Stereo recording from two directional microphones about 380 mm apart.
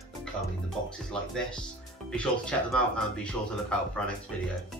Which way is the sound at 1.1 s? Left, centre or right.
Centre.